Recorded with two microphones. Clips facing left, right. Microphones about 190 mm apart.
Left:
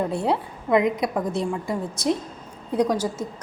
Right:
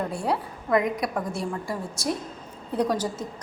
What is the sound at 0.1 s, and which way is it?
A woman's voice, 20° left (ahead or behind).